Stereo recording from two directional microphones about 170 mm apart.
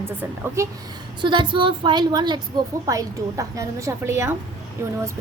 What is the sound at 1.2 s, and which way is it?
A woman's voice, 30° right (ahead or behind).